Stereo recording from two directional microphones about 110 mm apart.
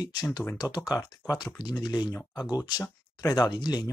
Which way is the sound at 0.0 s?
35° left (ahead or behind).